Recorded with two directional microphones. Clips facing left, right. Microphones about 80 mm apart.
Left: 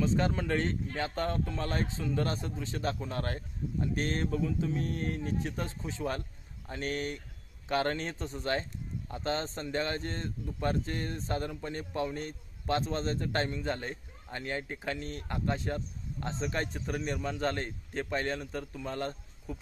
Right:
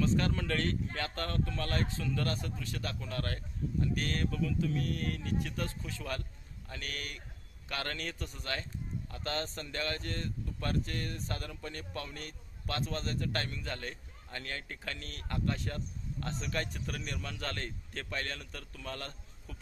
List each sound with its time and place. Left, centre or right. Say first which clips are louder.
0.0 s a man's voice: left 2 dB; left